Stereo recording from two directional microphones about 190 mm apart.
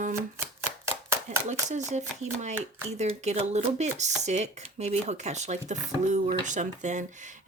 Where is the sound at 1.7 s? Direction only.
40° right (ahead or behind).